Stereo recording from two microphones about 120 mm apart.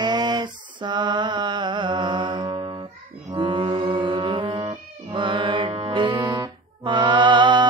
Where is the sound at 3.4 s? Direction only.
45° right (ahead or behind).